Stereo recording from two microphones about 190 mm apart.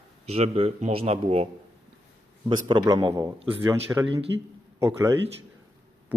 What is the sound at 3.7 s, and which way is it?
Speech, 10° right (ahead or behind).